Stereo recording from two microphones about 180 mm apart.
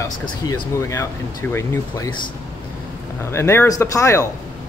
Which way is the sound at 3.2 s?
15° left (ahead or behind).